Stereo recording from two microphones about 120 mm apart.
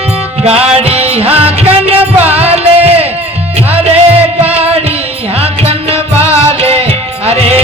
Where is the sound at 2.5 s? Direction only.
55° right (ahead or behind).